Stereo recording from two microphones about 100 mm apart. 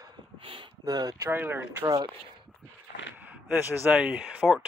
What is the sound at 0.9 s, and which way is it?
Speech, 40° right (ahead or behind).